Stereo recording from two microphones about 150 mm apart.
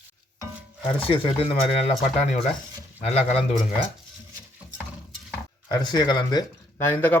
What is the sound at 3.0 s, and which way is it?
Speech, 45° left (ahead or behind).